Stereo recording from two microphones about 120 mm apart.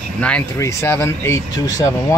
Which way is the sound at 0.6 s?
25° left (ahead or behind).